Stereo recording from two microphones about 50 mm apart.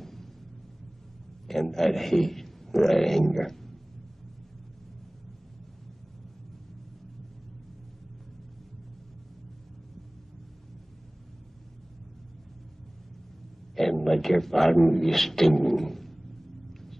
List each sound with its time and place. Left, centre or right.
0.0 s a sound: centre
1.5 s a man's voice: centre
13.7 s speech: centre